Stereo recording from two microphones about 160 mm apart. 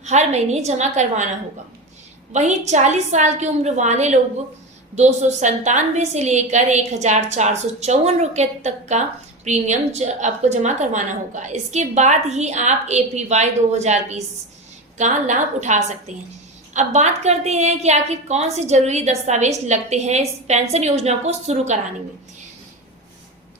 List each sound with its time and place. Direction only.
0.0 s a woman's voice: 45° right (ahead or behind)
2.3 s a woman's voice: 45° right (ahead or behind)